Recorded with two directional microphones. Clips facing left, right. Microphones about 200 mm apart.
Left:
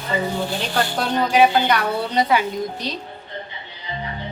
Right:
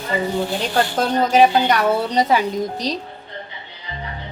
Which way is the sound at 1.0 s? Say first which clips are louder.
Right 2 dB; 40° right (ahead or behind).